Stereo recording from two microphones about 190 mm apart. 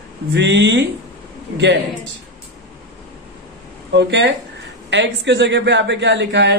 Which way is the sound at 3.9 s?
65° right (ahead or behind).